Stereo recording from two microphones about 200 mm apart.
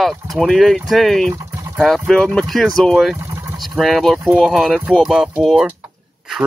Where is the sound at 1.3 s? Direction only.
15° right (ahead or behind).